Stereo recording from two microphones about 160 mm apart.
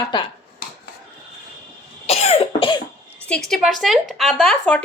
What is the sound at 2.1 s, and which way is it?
Cough, 40° left (ahead or behind).